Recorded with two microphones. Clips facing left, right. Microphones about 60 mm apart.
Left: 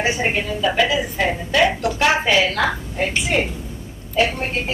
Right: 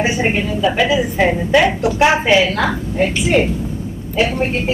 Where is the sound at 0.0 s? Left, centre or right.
Centre.